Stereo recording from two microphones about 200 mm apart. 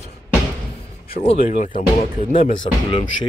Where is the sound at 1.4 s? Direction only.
40° left (ahead or behind).